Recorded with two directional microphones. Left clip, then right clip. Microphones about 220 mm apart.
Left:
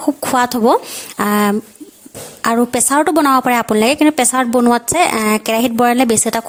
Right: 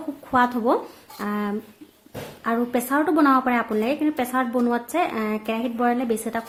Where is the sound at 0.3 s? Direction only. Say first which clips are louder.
Left 6 dB; 50° left (ahead or behind).